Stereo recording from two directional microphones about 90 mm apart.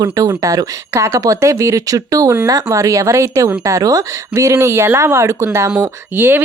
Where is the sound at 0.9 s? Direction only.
30° right (ahead or behind).